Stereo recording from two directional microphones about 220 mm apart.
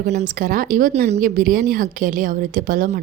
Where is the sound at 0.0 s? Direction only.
30° right (ahead or behind).